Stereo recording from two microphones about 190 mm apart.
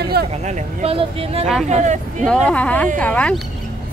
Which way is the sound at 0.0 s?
55° right (ahead or behind).